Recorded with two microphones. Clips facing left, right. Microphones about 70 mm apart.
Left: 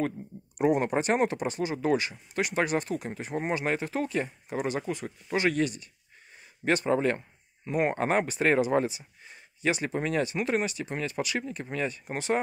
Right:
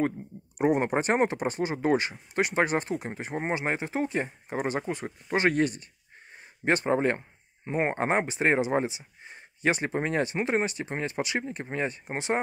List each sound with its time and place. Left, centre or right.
0.6 s speech: right